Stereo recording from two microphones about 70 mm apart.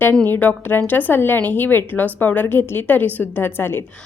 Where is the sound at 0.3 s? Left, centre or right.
Left.